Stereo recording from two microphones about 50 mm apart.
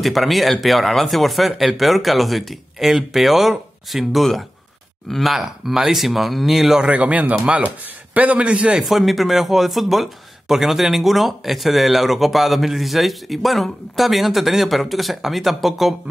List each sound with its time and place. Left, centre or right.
0.0 s speech: centre
6.8 s a man's voice: right
8.8 s speech: centre